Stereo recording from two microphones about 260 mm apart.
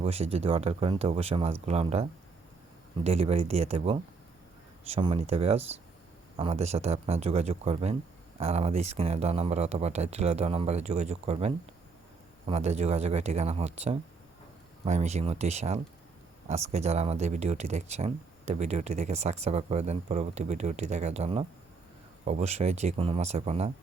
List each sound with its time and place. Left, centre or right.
0.0 s speech: right